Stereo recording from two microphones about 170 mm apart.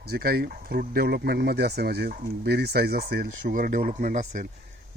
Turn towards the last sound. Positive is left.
turn(degrees=-50)  # may be behind; listen again after turning